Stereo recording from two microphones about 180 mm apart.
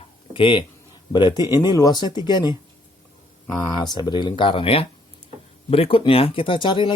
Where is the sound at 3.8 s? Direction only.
25° left (ahead or behind).